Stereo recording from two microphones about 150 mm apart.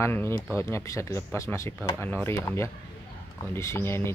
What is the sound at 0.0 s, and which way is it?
Speech, 15° left (ahead or behind).